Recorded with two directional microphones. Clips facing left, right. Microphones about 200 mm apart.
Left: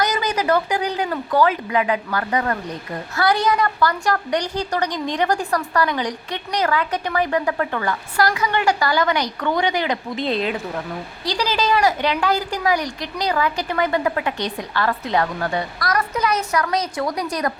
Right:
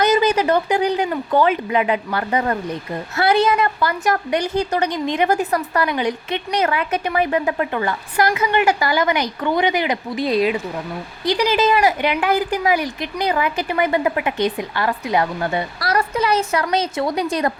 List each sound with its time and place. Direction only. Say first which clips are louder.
0.0 s a woman's voice: right 5 dB; 25° right (ahead or behind); by 10.6 s 5° right (ahead or behind)
11.3 s a woman's voice: right 4 dB; 20° right (ahead or behind)